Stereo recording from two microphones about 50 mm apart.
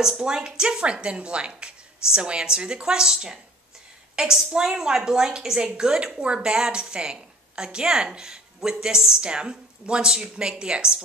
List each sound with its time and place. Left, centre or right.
0.0 s a woman's voice: centre